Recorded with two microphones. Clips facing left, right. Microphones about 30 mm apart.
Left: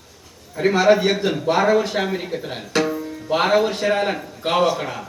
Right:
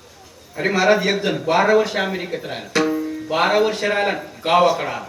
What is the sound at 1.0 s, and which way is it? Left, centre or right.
Speech, centre.